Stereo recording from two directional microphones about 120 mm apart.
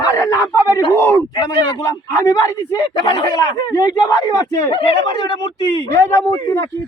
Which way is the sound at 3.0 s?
35° left (ahead or behind).